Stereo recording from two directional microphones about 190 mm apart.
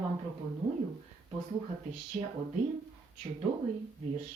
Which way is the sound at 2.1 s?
10° right (ahead or behind).